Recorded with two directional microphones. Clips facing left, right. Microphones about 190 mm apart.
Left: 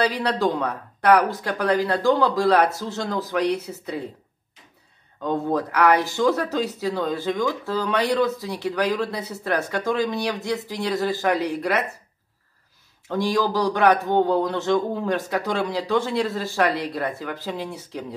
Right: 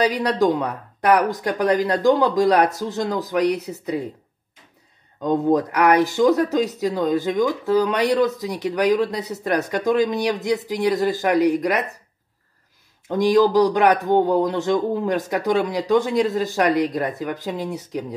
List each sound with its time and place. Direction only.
0.0 s speech: 15° right (ahead or behind)
5.2 s speech: 20° right (ahead or behind)
13.1 s speech: 15° right (ahead or behind)